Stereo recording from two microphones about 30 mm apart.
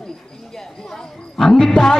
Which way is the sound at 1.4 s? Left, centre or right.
Centre.